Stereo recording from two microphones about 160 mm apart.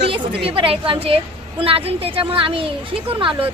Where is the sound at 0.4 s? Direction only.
35° right (ahead or behind).